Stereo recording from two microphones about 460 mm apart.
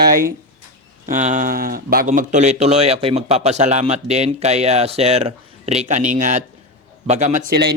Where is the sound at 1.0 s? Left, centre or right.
Centre.